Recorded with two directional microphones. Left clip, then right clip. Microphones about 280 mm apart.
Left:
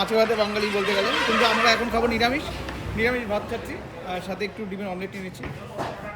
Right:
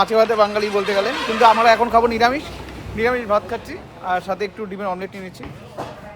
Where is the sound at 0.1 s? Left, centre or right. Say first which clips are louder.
Right 6 dB; centre.